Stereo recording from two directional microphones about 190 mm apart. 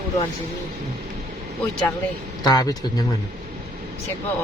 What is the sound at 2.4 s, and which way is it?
Speech, 20° left (ahead or behind).